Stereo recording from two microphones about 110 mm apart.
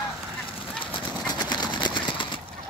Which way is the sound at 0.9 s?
40° left (ahead or behind).